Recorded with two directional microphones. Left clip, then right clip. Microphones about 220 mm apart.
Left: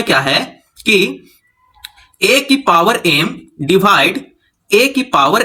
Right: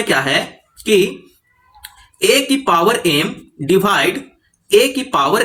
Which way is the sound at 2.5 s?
30° left (ahead or behind).